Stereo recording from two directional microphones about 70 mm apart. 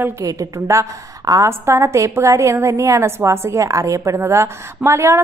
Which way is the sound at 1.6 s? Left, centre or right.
Right.